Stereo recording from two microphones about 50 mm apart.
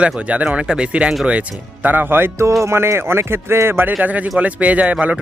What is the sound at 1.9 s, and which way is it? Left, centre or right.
Speech, right.